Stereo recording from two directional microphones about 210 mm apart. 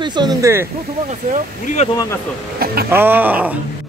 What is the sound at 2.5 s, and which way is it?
Speech, 45° right (ahead or behind).